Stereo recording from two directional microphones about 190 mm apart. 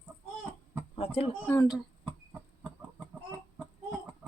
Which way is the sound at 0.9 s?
30° left (ahead or behind).